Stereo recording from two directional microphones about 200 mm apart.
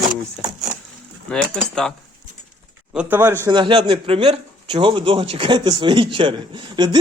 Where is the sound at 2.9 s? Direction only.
5° right (ahead or behind).